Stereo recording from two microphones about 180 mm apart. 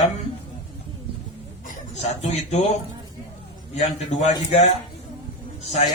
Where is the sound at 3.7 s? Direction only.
40° left (ahead or behind).